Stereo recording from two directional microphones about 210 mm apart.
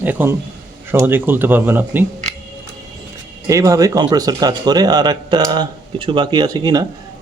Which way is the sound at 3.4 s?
15° right (ahead or behind).